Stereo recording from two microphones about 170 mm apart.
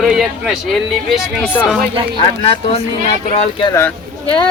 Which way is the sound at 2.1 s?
30° left (ahead or behind).